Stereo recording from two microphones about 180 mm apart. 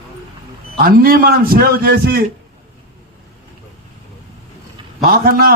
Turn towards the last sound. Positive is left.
turn(degrees=-55)  # may be behind; listen again after turning